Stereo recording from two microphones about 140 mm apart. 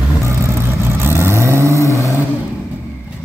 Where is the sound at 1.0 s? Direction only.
20° right (ahead or behind).